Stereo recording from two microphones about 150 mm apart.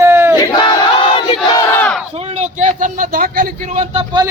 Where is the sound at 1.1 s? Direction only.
35° left (ahead or behind).